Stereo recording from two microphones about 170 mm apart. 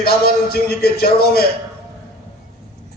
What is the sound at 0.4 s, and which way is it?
Speech, 65° left (ahead or behind).